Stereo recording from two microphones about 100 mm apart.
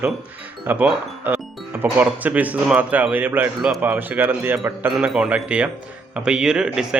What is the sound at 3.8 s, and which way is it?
A man's voice, 15° right (ahead or behind).